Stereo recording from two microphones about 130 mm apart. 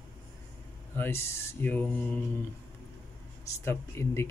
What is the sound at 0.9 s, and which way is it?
Speech, 20° left (ahead or behind).